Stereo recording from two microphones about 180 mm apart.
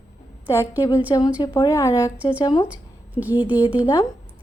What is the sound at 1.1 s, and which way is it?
Speech, 25° left (ahead or behind).